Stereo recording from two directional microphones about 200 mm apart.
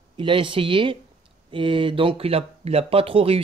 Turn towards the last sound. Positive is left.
turn(degrees=-30)  # may be behind; listen again after turning